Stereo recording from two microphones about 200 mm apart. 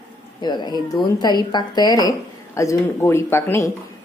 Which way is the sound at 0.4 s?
20° left (ahead or behind).